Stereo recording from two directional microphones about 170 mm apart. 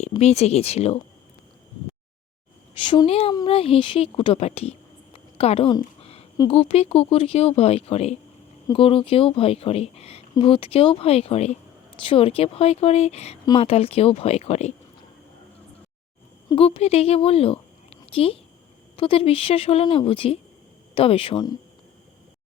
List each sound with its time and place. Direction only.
0.2 s a woman's voice: 40° left (ahead or behind)
2.7 s a woman's voice: 30° left (ahead or behind)
5.1 s a sound: 35° left (ahead or behind)
6.5 s a woman's voice: 35° left (ahead or behind)
16.5 s a woman's voice: 35° left (ahead or behind)
18.0 s a sound: 35° left (ahead or behind)
18.9 s a woman's voice: 30° left (ahead or behind)